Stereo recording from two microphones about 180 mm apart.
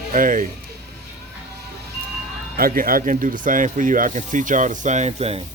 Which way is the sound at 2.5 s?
55° right (ahead or behind).